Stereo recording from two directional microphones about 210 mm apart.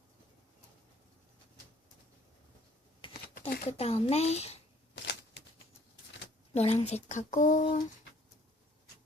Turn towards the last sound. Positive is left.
turn(degrees=35)  # may be behind; listen again after turning